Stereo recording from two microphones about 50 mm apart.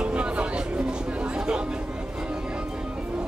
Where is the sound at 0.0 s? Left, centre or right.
Right.